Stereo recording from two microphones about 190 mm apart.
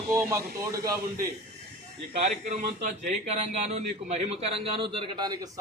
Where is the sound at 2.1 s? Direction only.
40° right (ahead or behind).